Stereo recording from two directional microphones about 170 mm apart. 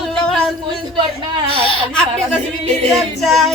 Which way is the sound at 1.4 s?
35° right (ahead or behind).